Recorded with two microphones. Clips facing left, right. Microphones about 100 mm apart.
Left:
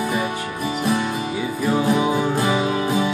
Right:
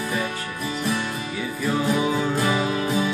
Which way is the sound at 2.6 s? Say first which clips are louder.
Left 3 dB; 45° left (ahead or behind).